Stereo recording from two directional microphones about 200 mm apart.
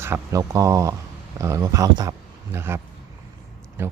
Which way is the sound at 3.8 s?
10° right (ahead or behind).